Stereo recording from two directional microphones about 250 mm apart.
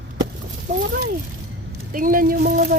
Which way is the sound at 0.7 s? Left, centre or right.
Right.